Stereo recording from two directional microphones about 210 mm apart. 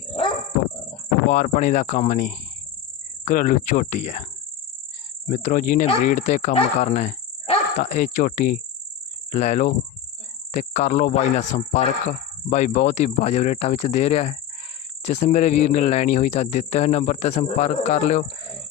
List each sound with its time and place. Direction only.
1.3 s speech: 35° left (ahead or behind)
5.3 s speech: 35° left (ahead or behind)